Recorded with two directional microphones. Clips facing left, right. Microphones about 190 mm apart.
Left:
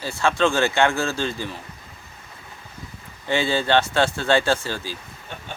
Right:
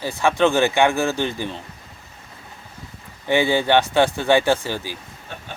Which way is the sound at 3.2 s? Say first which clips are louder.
Right 3 dB; 15° right (ahead or behind).